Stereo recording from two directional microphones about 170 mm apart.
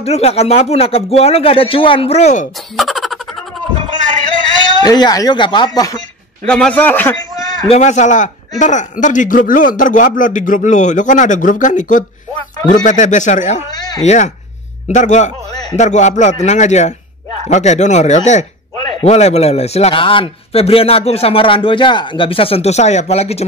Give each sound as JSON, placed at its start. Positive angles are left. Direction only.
{"t": 0.0, "sound": "a man's voice", "side_deg": 35}
{"t": 2.7, "sound": "a sound", "side_deg": 0}
{"t": 4.8, "sound": "speech", "side_deg": 25}
{"t": 6.4, "sound": "a man's voice", "side_deg": 5}
{"t": 7.6, "sound": "a man's voice", "side_deg": 40}